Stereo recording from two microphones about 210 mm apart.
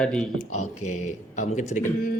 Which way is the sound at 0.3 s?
35° left (ahead or behind).